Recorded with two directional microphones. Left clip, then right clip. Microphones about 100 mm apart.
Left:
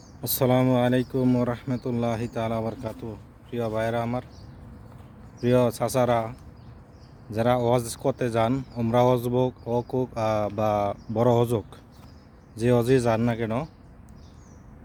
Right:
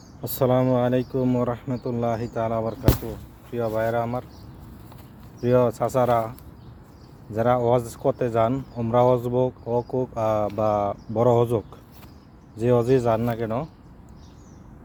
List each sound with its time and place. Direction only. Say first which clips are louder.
0.3 s speech: right 2 dB; 30° left (ahead or behind)
5.4 s speech: right 2 dB; 30° left (ahead or behind); by 13.7 s 45° left (ahead or behind)